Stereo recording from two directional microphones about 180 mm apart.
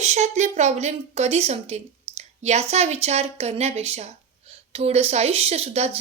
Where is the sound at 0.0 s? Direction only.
40° right (ahead or behind).